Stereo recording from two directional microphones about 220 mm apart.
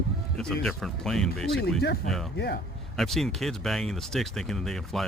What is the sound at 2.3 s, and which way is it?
Speech, 50° left (ahead or behind).